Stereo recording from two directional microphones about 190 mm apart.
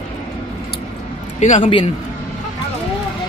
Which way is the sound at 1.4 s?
35° left (ahead or behind).